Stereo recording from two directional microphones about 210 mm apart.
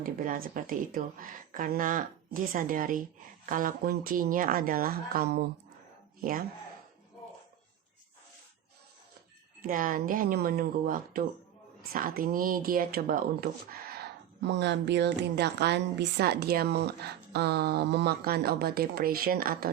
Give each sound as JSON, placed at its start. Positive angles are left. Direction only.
{"t": 0.0, "sound": "a woman's voice", "side_deg": -45}
{"t": 9.6, "sound": "a woman's voice", "side_deg": -40}
{"t": 14.4, "sound": "a woman's voice", "side_deg": -55}